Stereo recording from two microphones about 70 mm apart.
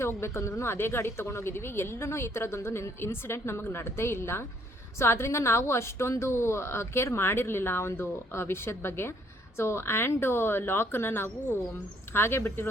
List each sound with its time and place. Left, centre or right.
0.0 s speech: left